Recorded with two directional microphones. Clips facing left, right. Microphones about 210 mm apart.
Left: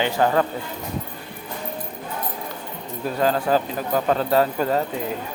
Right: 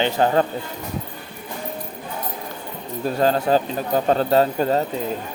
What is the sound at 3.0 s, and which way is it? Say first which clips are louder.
Speech: right 2 dB; 30° right (ahead or behind).